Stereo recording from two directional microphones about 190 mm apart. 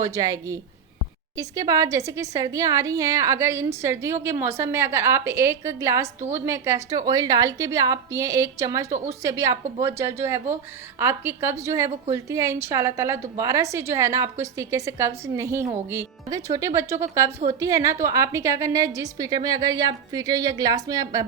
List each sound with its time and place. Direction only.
0.0 s a woman's voice: 15° right (ahead or behind)